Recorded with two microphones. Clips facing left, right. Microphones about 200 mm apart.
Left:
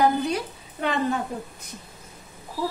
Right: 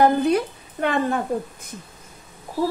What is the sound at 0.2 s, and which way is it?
Speech, 55° right (ahead or behind).